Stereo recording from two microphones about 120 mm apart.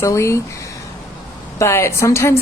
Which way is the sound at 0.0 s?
25° left (ahead or behind).